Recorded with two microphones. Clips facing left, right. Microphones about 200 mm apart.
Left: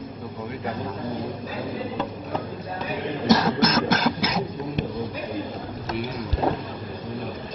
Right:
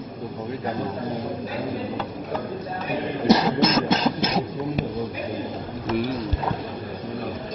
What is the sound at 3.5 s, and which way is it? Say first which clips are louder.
Beatboxing: right 1 dB; 25° right (ahead or behind).